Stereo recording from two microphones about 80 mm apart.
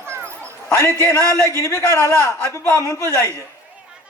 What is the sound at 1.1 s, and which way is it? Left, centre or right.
Speech, right.